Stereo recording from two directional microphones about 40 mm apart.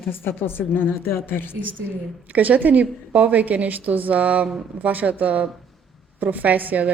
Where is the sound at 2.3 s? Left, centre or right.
Right.